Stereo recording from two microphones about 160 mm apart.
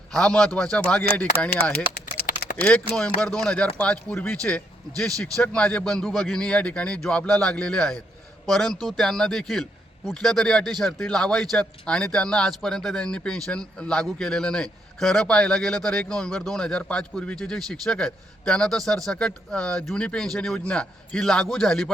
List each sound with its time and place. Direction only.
0.1 s speech: 5° left (ahead or behind)
2.0 s typing: 75° left (ahead or behind)
2.6 s speech: 5° left (ahead or behind)